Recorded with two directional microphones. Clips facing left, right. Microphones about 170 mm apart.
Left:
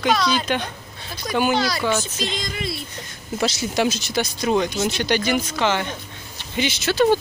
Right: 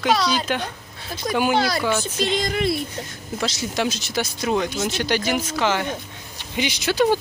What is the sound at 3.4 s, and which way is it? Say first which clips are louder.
Speech: left 3 dB; 5° left (ahead or behind).